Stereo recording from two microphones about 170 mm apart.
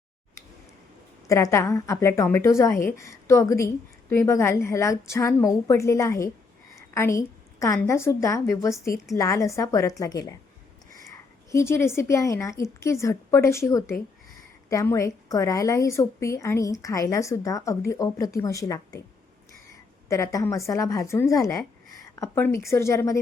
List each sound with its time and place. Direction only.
1.3 s a woman's voice: 15° left (ahead or behind)
6.7 s a sound: 15° left (ahead or behind)
7.8 s a woman's voice: 15° left (ahead or behind)
20.1 s a woman's voice: 20° left (ahead or behind)